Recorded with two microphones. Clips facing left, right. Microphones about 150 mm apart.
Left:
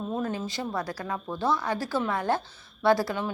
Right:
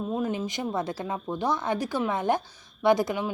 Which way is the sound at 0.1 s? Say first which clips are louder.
Right 2 dB; 15° right (ahead or behind).